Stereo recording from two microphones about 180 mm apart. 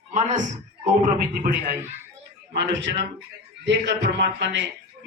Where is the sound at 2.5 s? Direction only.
80° right.